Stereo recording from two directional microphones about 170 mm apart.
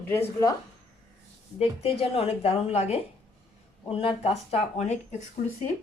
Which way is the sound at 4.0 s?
35° left (ahead or behind).